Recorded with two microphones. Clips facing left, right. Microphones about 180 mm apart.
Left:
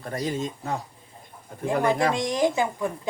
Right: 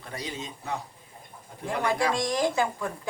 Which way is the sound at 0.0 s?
45° left (ahead or behind).